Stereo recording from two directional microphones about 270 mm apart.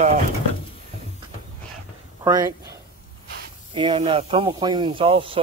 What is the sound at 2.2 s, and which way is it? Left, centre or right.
Speech, centre.